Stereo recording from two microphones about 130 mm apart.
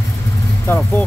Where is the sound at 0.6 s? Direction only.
15° left (ahead or behind).